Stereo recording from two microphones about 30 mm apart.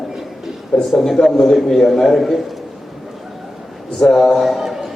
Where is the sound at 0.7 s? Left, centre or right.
Left.